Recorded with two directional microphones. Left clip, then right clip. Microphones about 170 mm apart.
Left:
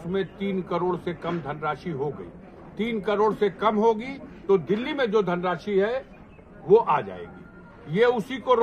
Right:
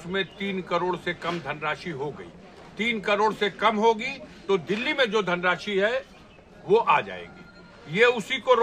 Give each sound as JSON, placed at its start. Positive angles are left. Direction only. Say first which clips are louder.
{"t": 0.1, "sound": "a man's voice", "louder": "even", "side_deg": -30}
{"t": 4.5, "sound": "a man's voice", "louder": "left 2 dB", "side_deg": -35}